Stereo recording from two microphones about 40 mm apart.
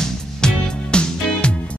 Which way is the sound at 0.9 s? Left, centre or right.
Left.